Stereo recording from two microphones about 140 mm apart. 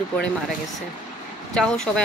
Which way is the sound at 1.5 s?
5° left (ahead or behind).